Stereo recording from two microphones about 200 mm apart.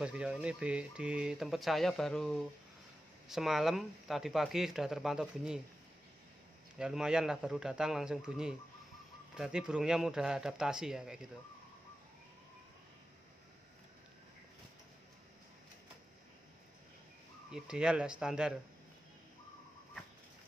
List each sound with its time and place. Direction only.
0.0 s speech: 5° right (ahead or behind)
6.8 s speech: 5° right (ahead or behind)
17.5 s speech: 5° right (ahead or behind)